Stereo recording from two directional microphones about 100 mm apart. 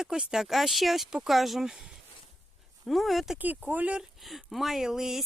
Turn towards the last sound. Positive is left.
turn(degrees=-5)  # may be behind; listen again after turning